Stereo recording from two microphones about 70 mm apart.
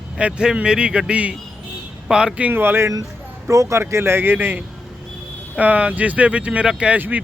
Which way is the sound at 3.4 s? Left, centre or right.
Right.